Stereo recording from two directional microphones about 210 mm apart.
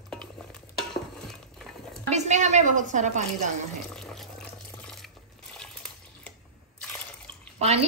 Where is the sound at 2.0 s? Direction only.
35° right (ahead or behind).